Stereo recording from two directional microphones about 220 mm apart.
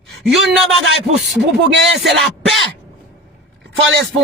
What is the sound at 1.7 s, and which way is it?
Speech, 50° right (ahead or behind).